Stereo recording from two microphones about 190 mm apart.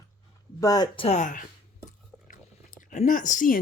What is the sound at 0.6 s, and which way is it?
Speech, 20° left (ahead or behind).